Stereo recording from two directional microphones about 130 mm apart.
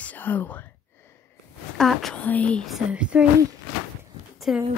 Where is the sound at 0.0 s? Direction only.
15° left (ahead or behind).